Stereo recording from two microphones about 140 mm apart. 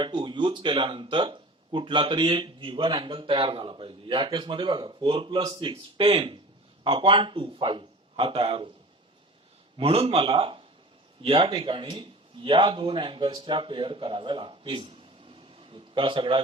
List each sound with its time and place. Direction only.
0.0 s speech: 35° right (ahead or behind)
9.7 s speech: 45° right (ahead or behind)